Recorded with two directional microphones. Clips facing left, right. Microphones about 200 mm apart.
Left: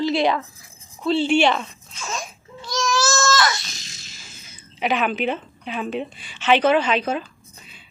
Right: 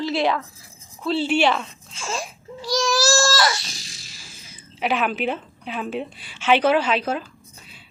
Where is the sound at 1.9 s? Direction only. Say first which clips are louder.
Right 2 dB; 30° right (ahead or behind).